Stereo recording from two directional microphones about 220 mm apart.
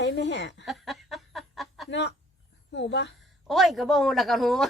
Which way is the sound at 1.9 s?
50° left (ahead or behind).